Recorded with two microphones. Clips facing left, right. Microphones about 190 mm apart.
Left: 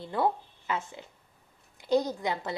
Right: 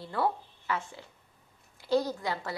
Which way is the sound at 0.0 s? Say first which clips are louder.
Left 2 dB; 20° left (ahead or behind).